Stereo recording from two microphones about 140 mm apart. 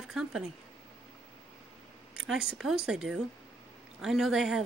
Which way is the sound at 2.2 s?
5° right (ahead or behind).